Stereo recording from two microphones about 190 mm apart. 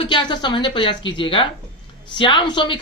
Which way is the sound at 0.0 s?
25° left (ahead or behind).